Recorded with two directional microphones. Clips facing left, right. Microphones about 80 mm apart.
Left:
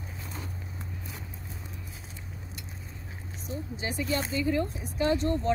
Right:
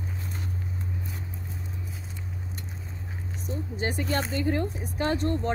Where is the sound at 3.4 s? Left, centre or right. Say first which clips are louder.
Right 4 dB; right.